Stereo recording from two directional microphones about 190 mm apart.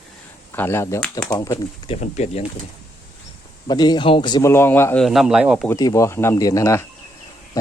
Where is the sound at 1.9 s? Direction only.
35° left (ahead or behind).